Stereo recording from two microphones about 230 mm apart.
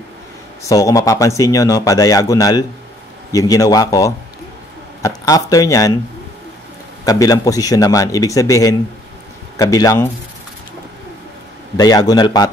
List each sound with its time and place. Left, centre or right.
0.7 s a man's voice: centre
7.1 s a man's voice: centre
11.7 s a man's voice: centre